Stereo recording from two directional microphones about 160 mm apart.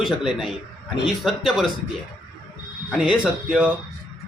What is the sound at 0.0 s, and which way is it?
A man's voice, 5° right (ahead or behind).